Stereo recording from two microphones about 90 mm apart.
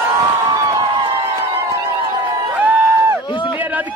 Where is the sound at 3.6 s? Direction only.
20° right (ahead or behind).